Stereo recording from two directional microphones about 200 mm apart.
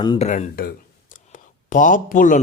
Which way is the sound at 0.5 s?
50° left (ahead or behind).